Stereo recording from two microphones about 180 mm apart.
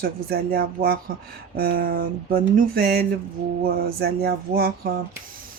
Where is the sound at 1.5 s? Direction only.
55° right (ahead or behind).